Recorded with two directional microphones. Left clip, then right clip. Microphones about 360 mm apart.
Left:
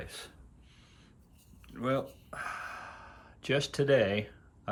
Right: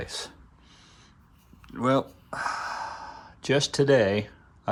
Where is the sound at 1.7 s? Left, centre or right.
Centre.